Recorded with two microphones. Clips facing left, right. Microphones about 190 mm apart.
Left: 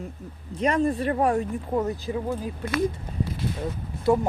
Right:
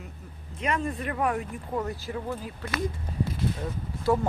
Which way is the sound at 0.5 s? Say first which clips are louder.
Left 7 dB; 35° left (ahead or behind).